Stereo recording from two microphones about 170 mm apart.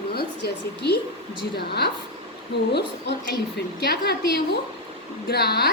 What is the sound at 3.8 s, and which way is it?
A woman's voice, 70° left (ahead or behind).